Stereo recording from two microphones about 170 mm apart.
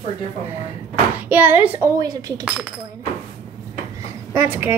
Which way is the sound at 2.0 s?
20° right (ahead or behind).